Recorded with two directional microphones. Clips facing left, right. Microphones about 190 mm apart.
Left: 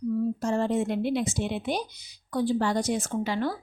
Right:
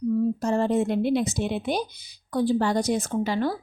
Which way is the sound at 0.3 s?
35° right (ahead or behind).